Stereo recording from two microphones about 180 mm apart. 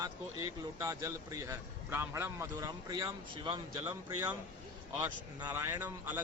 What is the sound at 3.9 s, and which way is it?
Speech, 10° right (ahead or behind).